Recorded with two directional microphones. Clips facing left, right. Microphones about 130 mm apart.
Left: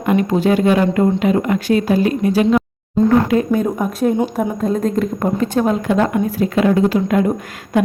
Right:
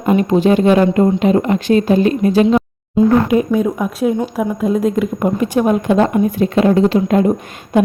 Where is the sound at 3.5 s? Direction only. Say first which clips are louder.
Right 1 dB; 5° right (ahead or behind); by 7.3 s 30° right (ahead or behind).